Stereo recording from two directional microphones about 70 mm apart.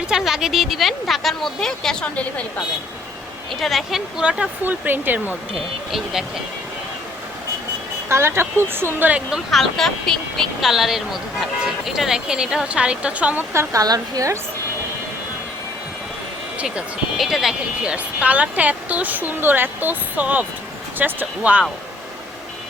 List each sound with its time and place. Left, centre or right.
0.1 s speech: centre
3.5 s speech: centre
4.2 s speech: centre
4.6 s a woman's voice: right
8.1 s speech: right
9.5 s speech: centre
13.7 s a woman's voice: right
17.2 s speech: centre
17.8 s a woman's voice: centre